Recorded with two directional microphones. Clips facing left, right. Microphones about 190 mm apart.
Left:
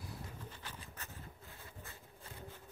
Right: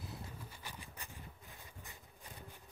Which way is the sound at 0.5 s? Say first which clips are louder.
Left 1 dB; 10° right (ahead or behind).